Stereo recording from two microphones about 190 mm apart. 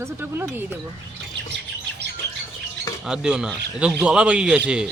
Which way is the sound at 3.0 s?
5° right (ahead or behind).